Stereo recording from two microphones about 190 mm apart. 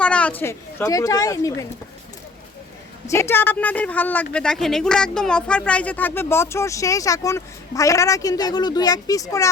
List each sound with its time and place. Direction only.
0.0 s speech: 5° left (ahead or behind)
3.1 s speech: 15° left (ahead or behind)